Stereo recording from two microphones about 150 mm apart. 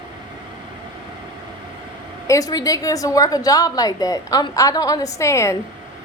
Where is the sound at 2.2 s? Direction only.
20° left (ahead or behind).